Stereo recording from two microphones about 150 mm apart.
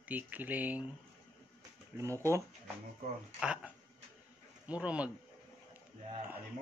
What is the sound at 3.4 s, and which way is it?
Speech, 5° right (ahead or behind).